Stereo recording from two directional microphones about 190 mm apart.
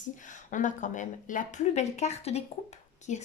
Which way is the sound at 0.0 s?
40° left (ahead or behind).